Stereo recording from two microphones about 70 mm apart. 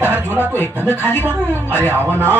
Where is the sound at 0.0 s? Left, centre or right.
Left.